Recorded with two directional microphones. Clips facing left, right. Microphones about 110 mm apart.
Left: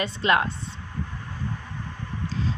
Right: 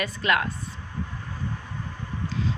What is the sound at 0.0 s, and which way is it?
Speech, 25° left (ahead or behind).